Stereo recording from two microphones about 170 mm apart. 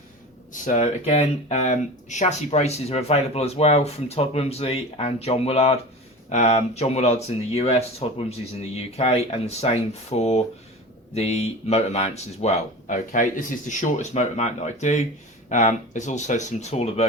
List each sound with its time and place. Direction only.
0.5 s speech: 50° left (ahead or behind)